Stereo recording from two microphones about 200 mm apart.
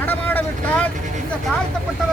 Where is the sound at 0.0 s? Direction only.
10° left (ahead or behind).